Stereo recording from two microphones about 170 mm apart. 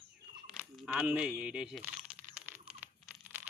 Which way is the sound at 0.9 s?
10° right (ahead or behind).